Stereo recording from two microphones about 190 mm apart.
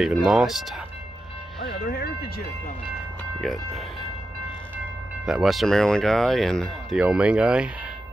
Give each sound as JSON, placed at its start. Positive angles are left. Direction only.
{"t": 0.0, "sound": "speech", "side_deg": -5}
{"t": 1.9, "sound": "music", "side_deg": 55}
{"t": 3.3, "sound": "speech", "side_deg": 0}
{"t": 5.2, "sound": "speech", "side_deg": 0}